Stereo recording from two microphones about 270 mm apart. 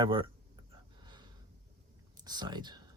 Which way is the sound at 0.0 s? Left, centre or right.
Centre.